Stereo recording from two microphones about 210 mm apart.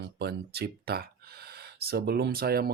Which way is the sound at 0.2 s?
50° right (ahead or behind).